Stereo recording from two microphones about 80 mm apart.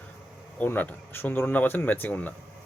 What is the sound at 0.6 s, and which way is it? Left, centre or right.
Speech, centre.